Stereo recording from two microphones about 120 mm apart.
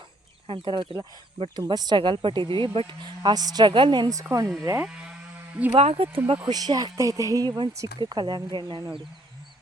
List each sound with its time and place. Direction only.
0.4 s speech: 45° right (ahead or behind); by 4.5 s 25° right (ahead or behind)
4.8 s electric shaver: 10° right (ahead or behind)
5.7 s speech: 55° right (ahead or behind)
6.5 s speech: 35° right (ahead or behind)